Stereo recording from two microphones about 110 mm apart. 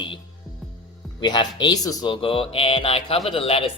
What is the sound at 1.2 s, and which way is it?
Speech, 45° left (ahead or behind).